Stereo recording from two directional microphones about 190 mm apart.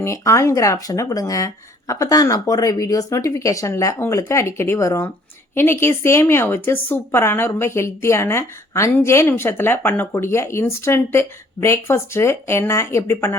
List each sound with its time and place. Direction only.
0.0 s a woman's voice: 15° left (ahead or behind)